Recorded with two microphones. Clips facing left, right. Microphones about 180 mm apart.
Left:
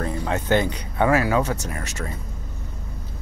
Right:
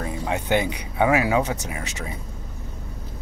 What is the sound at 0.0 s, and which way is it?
Speech, 10° right (ahead or behind).